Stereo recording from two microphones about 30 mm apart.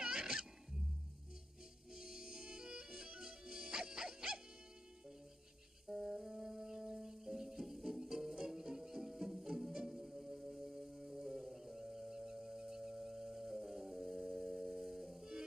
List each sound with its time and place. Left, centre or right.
0.0 s music: right
2.0 s music: centre
5.9 s music: right
6.2 s music: centre
12.9 s music: centre